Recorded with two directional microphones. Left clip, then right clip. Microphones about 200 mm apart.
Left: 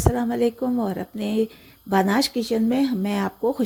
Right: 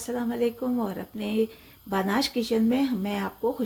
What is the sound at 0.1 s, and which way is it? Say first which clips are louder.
A woman's voice: left 3 dB; 30° left (ahead or behind).